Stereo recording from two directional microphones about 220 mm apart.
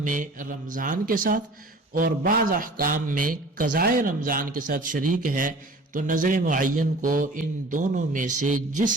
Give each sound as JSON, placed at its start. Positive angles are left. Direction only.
{"t": 0.0, "sound": "a man's voice", "side_deg": -35}